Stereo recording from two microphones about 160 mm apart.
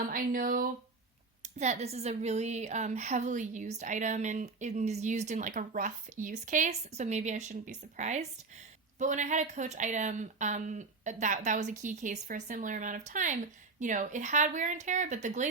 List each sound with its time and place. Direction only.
0.1 s speech: 60° right (ahead or behind)
1.4 s a woman's voice: 45° right (ahead or behind)